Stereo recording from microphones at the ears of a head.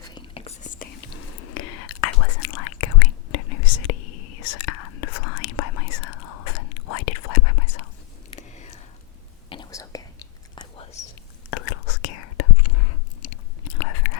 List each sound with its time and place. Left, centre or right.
0.5 s whispering: left
8.4 s a sound: left
10.8 s whispering: left